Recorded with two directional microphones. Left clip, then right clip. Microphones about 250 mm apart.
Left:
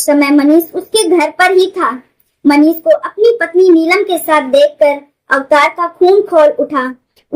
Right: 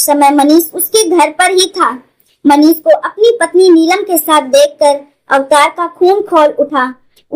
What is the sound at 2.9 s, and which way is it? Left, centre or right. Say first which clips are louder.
A child's voice: right 1 dB; right.